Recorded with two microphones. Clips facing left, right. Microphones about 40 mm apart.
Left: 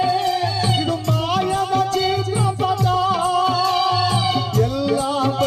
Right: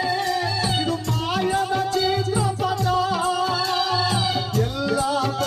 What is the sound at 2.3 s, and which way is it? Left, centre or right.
Music, left.